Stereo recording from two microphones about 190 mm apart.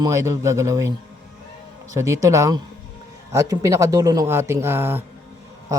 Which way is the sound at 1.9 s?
15° right (ahead or behind).